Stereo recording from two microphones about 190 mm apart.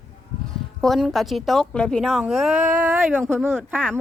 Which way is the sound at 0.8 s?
Centre (ahead or behind).